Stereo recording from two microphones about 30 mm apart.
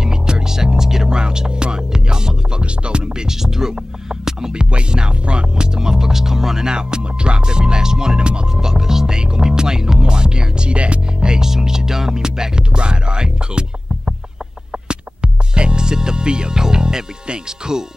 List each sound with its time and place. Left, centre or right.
0.0 s music: right
2.6 s music: right
3.1 s music: centre
4.6 s music: right
5.5 s music: right
8.5 s music: centre; by 11.0 s right
11.1 s music: right